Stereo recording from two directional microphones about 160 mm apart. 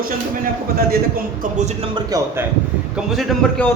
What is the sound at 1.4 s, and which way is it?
Speech, 45° right (ahead or behind).